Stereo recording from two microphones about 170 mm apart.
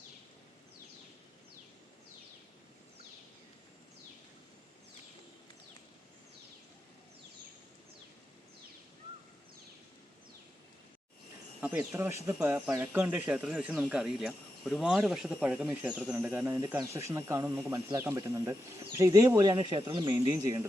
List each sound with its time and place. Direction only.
11.6 s speech: 10° right (ahead or behind)